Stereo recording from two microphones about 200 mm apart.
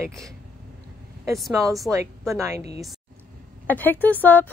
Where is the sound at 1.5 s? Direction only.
15° right (ahead or behind).